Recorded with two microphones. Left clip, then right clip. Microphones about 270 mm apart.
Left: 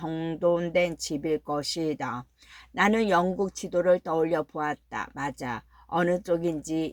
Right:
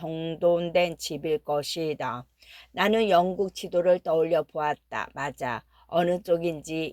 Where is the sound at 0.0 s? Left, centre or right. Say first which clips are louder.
Right 1 dB; right.